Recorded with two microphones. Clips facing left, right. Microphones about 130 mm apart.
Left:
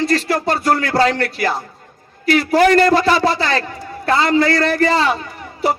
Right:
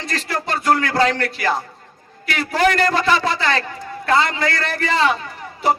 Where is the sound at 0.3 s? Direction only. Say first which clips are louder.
Left 3 dB; 40° left (ahead or behind).